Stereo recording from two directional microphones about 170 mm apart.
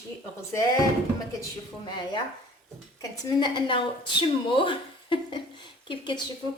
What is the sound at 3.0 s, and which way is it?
A woman's voice, 25° left (ahead or behind).